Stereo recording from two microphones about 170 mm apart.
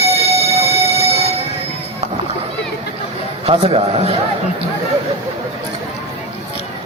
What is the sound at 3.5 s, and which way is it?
Speech, 35° right (ahead or behind).